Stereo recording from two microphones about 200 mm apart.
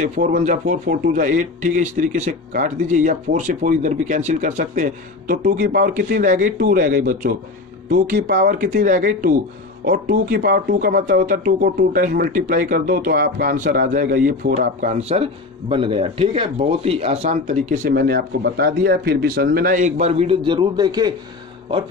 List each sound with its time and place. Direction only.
0.0 s speech: 40° right (ahead or behind)
15.0 s speech: 30° right (ahead or behind)